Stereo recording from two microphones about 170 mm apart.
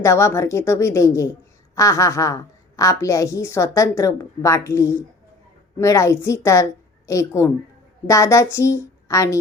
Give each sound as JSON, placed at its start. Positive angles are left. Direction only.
{"t": 0.0, "sound": "a woman's voice", "side_deg": 15}